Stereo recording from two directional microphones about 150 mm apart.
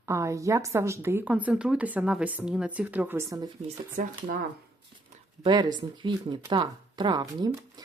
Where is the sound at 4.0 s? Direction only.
60° right (ahead or behind).